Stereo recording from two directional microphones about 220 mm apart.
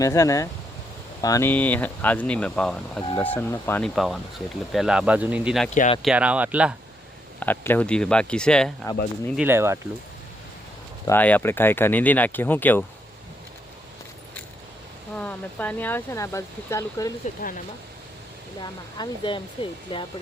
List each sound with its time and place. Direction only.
0.0 s speech: 15° left (ahead or behind); by 5.6 s 5° right (ahead or behind)
5.7 s speech: 35° left (ahead or behind)
6.0 s speech: 5° right (ahead or behind)
7.3 s speech: 10° left (ahead or behind)
9.3 s speech: 10° right (ahead or behind)
11.0 s speech: 10° left (ahead or behind)
15.1 s speech: 5° left (ahead or behind)
18.6 s speech: 20° left (ahead or behind)